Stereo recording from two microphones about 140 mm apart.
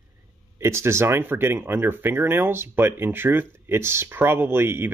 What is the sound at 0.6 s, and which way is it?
Speech, 20° right (ahead or behind).